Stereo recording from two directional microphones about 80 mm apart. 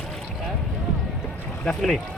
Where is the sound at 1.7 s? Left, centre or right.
Centre.